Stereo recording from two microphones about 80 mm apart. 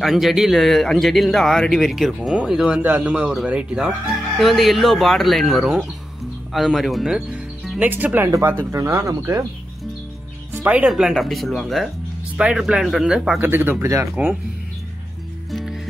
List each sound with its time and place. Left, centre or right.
0.0 s speech: centre
7.8 s speech: right
9.2 s speech: right
10.5 s music: centre
10.9 s speech: centre
13.4 s speech: right
15.5 s music: centre